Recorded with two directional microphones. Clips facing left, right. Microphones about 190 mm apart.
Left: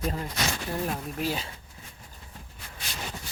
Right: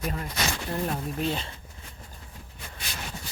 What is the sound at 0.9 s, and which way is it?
Speech, 5° left (ahead or behind).